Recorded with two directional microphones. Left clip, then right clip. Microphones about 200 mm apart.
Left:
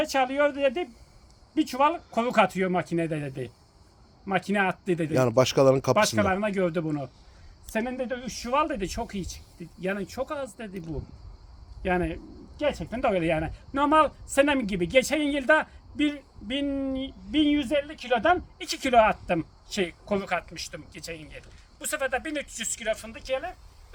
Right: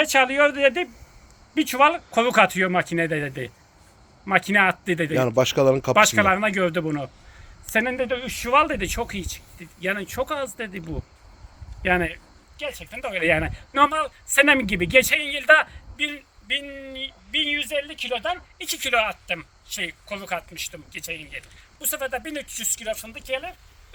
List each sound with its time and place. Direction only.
0.0 s a man's voice: 15° right (ahead or behind)
5.1 s speech: 10° left (ahead or behind)
6.1 s a man's voice: 10° right (ahead or behind)
11.8 s a sound: 15° right (ahead or behind)
12.8 s a man's voice: 10° right (ahead or behind)
18.6 s speech: 15° left (ahead or behind)
19.3 s a man's voice: 10° right (ahead or behind)